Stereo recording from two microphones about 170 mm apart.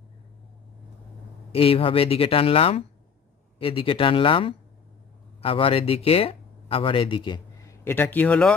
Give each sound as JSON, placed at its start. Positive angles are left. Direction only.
{"t": 1.5, "sound": "speech", "side_deg": 35}
{"t": 7.8, "sound": "speech", "side_deg": 10}